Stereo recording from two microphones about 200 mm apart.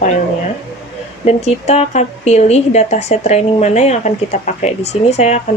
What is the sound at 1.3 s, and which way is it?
Speech, 35° left (ahead or behind).